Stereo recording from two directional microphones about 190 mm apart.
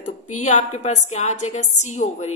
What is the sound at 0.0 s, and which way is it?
A woman's voice, 40° left (ahead or behind).